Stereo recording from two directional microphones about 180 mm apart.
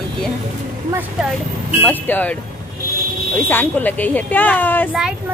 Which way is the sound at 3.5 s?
10° left (ahead or behind).